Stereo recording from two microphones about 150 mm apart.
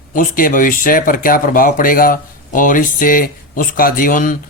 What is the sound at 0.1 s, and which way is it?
Speech, 70° left (ahead or behind).